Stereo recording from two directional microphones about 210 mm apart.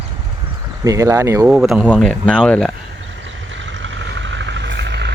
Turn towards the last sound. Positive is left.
turn(degrees=-55)  # may be behind; listen again after turning